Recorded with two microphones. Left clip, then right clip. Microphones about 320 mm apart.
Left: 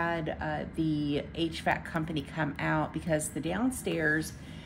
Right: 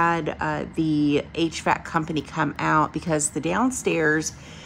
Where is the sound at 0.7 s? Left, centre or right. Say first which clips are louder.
Right 10 dB; right.